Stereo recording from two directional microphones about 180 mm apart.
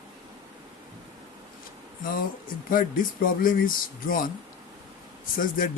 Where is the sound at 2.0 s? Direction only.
50° left (ahead or behind).